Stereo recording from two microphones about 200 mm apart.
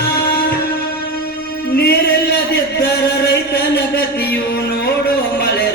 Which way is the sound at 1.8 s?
50° left (ahead or behind).